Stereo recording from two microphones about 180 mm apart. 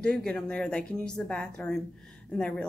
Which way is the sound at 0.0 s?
5° left (ahead or behind).